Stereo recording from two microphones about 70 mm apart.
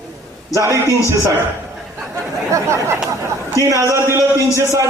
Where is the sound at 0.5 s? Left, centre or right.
Right.